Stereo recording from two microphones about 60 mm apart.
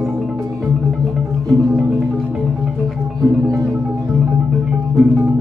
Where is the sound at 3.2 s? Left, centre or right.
Right.